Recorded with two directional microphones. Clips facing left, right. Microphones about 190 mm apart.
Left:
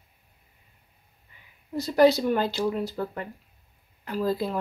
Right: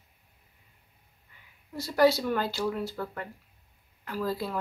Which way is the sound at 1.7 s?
20° left (ahead or behind).